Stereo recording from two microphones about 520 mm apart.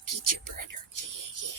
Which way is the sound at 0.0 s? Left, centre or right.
Right.